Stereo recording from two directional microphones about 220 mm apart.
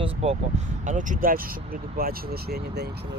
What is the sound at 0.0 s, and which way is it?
Speech, 30° right (ahead or behind).